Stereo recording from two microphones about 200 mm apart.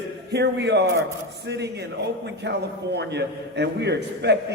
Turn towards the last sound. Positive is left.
turn(degrees=-55)  # may be behind; listen again after turning